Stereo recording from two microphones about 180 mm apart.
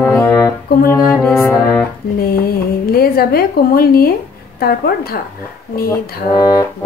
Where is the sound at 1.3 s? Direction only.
15° left (ahead or behind).